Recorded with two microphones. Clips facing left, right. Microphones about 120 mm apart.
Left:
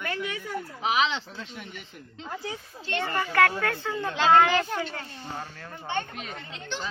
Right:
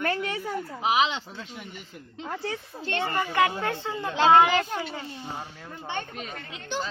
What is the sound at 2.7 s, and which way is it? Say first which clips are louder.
Speech: right 6 dB; 35° right (ahead or behind).